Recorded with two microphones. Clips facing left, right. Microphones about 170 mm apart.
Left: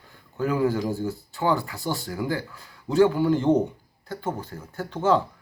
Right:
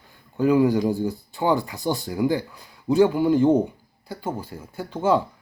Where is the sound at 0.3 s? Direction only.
15° right (ahead or behind).